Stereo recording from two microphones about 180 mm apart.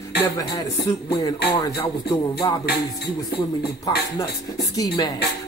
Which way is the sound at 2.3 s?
25° left (ahead or behind).